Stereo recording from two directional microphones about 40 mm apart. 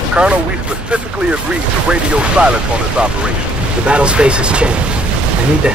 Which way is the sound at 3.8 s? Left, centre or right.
Right.